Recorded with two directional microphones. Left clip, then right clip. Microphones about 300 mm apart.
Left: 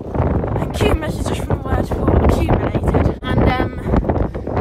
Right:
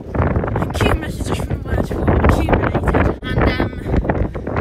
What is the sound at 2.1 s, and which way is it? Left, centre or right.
Wind noise, centre.